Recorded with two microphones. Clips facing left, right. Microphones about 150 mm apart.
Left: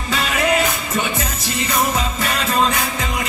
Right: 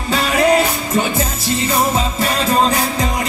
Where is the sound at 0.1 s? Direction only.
35° right (ahead or behind).